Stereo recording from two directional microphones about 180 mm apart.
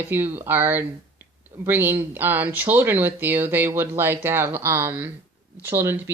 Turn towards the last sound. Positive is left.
turn(degrees=-15)  # may be behind; listen again after turning